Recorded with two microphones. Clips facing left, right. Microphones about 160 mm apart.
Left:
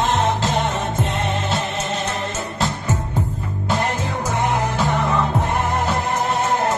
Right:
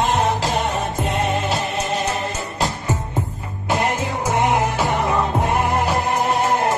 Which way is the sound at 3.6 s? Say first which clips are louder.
Right 2 dB; 15° right (ahead or behind).